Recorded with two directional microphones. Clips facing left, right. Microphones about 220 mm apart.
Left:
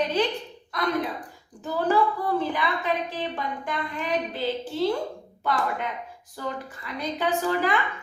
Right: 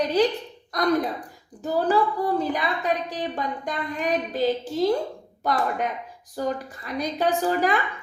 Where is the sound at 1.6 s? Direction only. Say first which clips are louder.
Right 1 dB; 35° right (ahead or behind).